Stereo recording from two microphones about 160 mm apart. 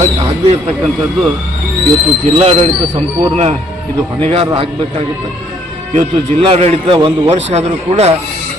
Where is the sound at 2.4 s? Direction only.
40° right (ahead or behind).